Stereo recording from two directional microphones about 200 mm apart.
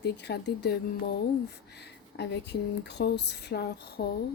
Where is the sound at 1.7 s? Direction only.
55° left (ahead or behind).